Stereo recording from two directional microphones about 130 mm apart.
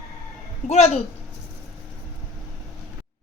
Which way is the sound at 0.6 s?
60° left (ahead or behind).